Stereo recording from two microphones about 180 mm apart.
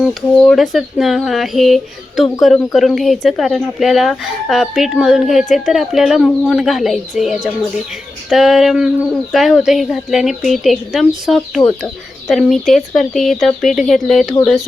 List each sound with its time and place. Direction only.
0.0 s speech: centre (ahead or behind)